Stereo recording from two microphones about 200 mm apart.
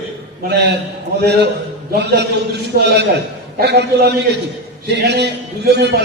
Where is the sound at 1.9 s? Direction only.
55° right (ahead or behind).